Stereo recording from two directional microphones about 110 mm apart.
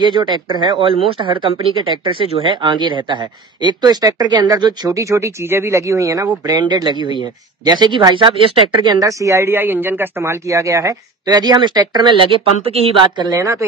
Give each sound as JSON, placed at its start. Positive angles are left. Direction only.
{"t": 0.0, "sound": "speech", "side_deg": -45}
{"t": 9.0, "sound": "speech", "side_deg": -25}
{"t": 13.3, "sound": "speech", "side_deg": -25}